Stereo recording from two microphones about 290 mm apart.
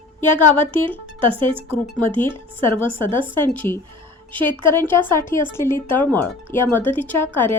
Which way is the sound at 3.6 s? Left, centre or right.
Left.